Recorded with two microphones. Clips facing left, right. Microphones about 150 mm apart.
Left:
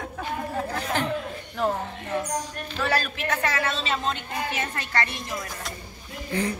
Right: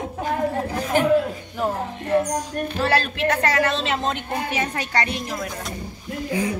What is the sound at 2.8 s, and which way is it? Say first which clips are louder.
Speech: right 4 dB; 30° right (ahead or behind).